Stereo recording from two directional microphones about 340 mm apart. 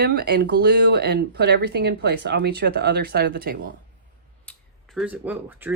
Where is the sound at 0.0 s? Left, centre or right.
Right.